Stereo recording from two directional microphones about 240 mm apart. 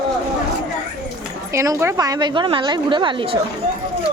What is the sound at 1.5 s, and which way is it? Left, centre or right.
A woman's voice, centre.